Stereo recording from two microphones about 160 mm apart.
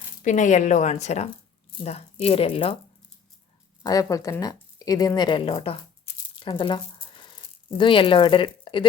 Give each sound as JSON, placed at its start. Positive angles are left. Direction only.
{"t": 0.2, "sound": "a woman's voice", "side_deg": 50}
{"t": 3.8, "sound": "speech", "side_deg": 20}
{"t": 6.4, "sound": "squish", "side_deg": 30}
{"t": 7.8, "sound": "speech", "side_deg": 30}